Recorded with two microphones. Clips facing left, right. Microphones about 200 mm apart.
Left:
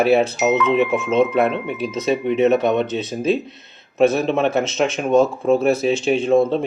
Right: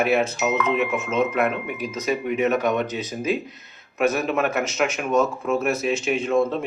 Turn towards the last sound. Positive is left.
turn(degrees=30)  # may be behind; listen again after turning